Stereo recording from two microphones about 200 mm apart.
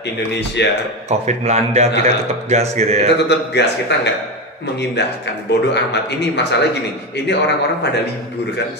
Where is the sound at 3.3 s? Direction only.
60° left (ahead or behind).